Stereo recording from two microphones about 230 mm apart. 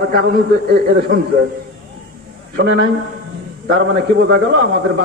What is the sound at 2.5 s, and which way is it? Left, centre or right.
A man's voice, right.